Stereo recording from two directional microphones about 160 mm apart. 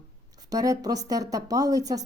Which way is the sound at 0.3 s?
20° right (ahead or behind).